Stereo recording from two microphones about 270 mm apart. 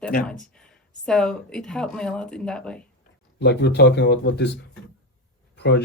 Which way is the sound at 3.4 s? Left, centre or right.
Left.